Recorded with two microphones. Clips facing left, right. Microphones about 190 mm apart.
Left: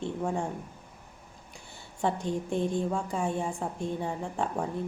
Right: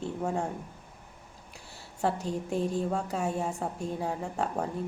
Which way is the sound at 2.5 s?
35° right (ahead or behind).